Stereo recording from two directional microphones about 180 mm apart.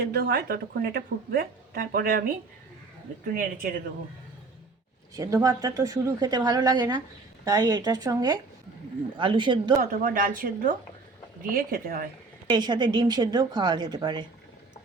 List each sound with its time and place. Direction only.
0.1 s speech: 60° right (ahead or behind)
3.3 s a woman's voice: 50° right (ahead or behind)
5.1 s a woman's voice: 20° right (ahead or behind)
10.0 s a woman's voice: 50° right (ahead or behind)
12.5 s a woman's voice: 25° right (ahead or behind)